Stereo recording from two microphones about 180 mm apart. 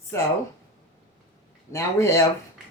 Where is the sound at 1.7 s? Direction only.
15° left (ahead or behind).